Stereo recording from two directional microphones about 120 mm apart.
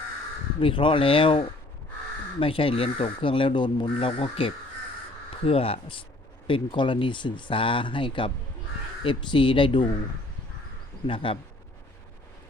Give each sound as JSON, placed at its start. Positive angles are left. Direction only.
{"t": 0.6, "sound": "speech", "side_deg": 45}
{"t": 11.0, "sound": "speech", "side_deg": 45}